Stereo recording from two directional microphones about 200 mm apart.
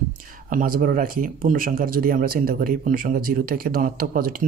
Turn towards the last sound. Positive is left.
turn(degrees=-45)  # may be behind; listen again after turning